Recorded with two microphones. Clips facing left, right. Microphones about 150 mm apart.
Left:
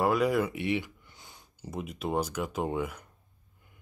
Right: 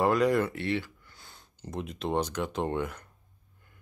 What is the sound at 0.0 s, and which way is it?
Speech, 5° left (ahead or behind).